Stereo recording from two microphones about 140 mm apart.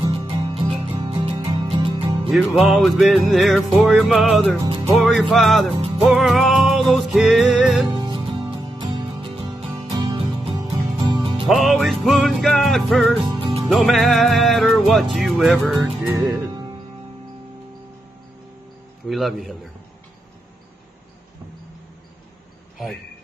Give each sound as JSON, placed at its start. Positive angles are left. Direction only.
{"t": 0.0, "sound": "music", "side_deg": -40}
{"t": 2.3, "sound": "music", "side_deg": 0}
{"t": 4.6, "sound": "music", "side_deg": -40}
{"t": 4.9, "sound": "music", "side_deg": 0}
{"t": 7.9, "sound": "music", "side_deg": -35}
{"t": 11.4, "sound": "music", "side_deg": 0}
{"t": 13.2, "sound": "music", "side_deg": -40}
{"t": 13.7, "sound": "music", "side_deg": 0}
{"t": 15.8, "sound": "music", "side_deg": -15}
{"t": 19.0, "sound": "music", "side_deg": 0}